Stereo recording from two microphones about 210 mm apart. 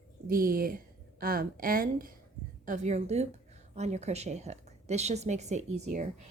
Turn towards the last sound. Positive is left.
turn(degrees=-30)  # may be behind; listen again after turning